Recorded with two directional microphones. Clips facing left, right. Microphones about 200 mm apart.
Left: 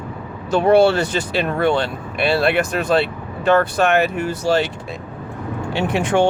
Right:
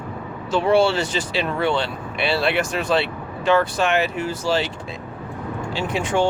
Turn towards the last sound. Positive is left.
turn(degrees=60)  # may be behind; listen again after turning